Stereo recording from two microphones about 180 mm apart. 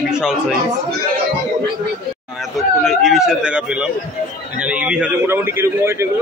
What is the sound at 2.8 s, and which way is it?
Speech, centre (ahead or behind).